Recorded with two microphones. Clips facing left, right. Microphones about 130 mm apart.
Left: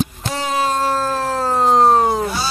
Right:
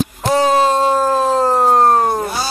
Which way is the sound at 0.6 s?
30° right (ahead or behind).